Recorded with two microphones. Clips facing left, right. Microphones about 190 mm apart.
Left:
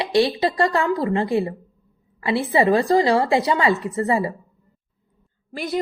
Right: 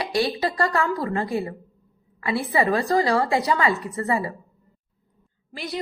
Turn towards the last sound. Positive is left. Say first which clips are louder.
# left 6 dB
turn(degrees=50)  # may be behind; listen again after turning